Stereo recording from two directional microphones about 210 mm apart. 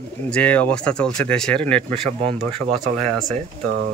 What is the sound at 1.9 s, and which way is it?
Speech, 30° right (ahead or behind).